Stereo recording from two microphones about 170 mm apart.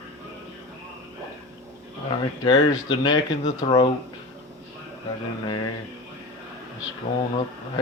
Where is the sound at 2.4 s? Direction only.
30° left (ahead or behind).